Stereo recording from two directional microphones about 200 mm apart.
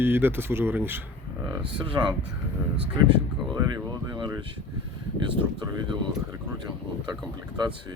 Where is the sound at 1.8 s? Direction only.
25° right (ahead or behind).